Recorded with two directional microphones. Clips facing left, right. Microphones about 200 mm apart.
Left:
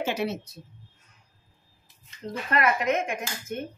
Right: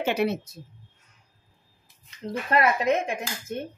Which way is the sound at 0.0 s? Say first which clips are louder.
Right 3 dB; 60° right (ahead or behind).